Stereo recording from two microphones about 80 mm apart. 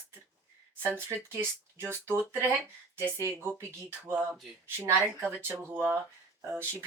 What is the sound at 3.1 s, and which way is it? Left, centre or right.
Speech, right.